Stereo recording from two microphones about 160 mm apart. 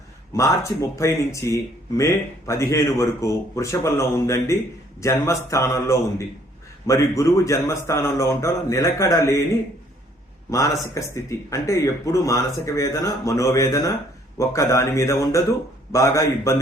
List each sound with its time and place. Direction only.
0.3 s speech: 20° left (ahead or behind)
10.5 s speech: 20° left (ahead or behind)